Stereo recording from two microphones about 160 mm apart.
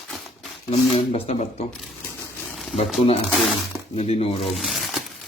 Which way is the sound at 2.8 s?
35° left (ahead or behind).